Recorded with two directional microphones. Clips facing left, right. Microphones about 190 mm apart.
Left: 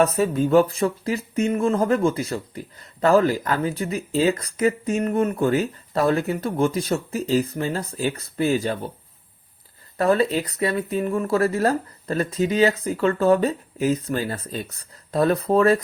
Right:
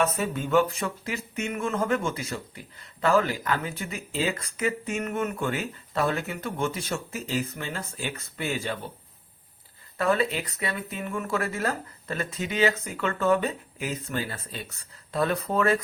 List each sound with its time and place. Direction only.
0.0 s speech: 35° left (ahead or behind)
10.0 s speech: 40° left (ahead or behind)